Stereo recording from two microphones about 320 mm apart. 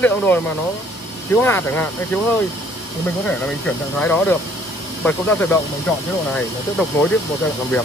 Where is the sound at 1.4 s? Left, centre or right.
Centre.